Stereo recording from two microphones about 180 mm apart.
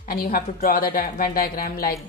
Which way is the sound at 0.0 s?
55° left (ahead or behind).